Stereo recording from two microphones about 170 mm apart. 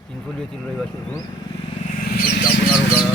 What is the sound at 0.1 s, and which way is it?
Speech, 5° left (ahead or behind).